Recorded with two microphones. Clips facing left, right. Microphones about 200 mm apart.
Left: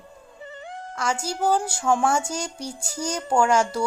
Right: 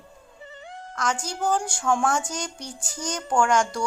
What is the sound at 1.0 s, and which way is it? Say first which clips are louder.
Speech: left 2 dB; 10° left (ahead or behind).